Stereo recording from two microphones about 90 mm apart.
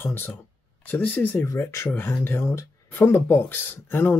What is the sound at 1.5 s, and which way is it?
Speech, 30° left (ahead or behind).